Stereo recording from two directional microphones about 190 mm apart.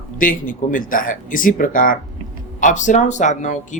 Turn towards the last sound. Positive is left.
turn(degrees=40)  # may be behind; listen again after turning